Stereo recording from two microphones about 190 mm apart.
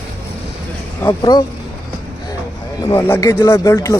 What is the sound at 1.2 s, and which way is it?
Speech, 20° left (ahead or behind).